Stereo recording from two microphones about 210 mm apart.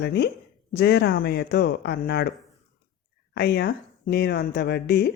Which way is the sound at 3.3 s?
50° left (ahead or behind).